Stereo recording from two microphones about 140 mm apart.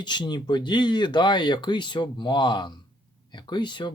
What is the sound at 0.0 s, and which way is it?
Speech, 30° left (ahead or behind).